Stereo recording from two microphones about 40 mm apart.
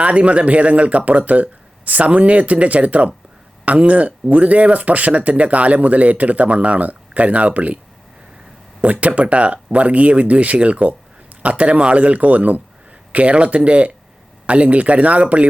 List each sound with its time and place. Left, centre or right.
0.0 s speech: right
8.8 s speech: right